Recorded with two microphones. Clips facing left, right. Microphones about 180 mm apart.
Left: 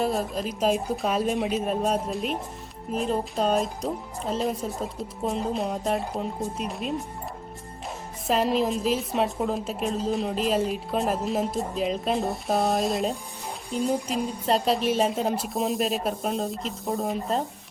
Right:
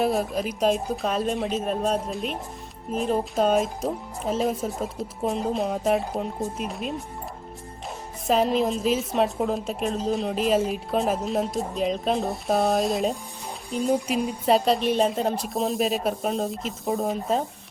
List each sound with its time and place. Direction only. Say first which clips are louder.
0.0 s a woman's voice: right 2 dB; 5° right (ahead or behind)
8.3 s a woman's voice: right 2 dB; centre (ahead or behind)